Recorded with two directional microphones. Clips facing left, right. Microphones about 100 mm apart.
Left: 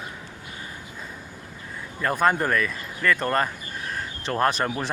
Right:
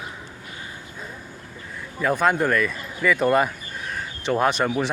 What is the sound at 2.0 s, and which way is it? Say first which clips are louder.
Speech: right 2 dB; centre (ahead or behind).